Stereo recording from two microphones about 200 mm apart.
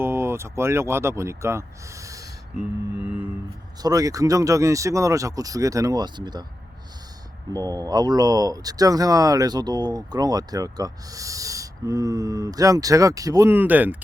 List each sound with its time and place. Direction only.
0.0 s speech: 10° right (ahead or behind)
3.0 s music: 30° left (ahead or behind)
3.8 s speech: 15° right (ahead or behind)
7.5 s speech: 20° right (ahead or behind)